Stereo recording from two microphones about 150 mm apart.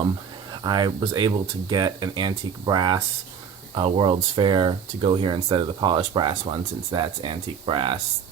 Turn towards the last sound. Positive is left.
turn(degrees=-35)  # may be behind; listen again after turning